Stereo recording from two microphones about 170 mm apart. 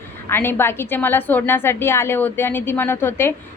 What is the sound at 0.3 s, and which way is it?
A woman's voice, 15° left (ahead or behind).